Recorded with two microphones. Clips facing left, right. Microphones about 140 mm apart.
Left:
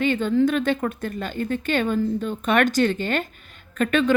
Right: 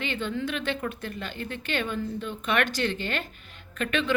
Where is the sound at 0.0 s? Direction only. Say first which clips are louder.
Left 11 dB; 45° left (ahead or behind).